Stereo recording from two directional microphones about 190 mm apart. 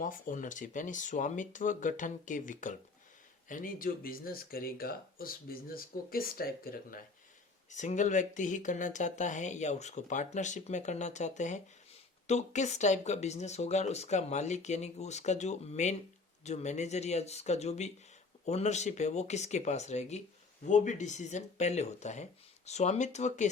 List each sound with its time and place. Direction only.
0.0 s speech: 45° left (ahead or behind)
7.7 s speech: 40° left (ahead or behind)